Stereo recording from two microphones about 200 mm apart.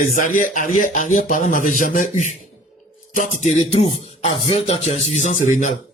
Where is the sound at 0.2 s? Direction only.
40° left (ahead or behind).